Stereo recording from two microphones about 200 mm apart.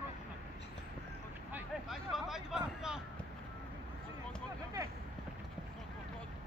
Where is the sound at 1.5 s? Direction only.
Centre (ahead or behind).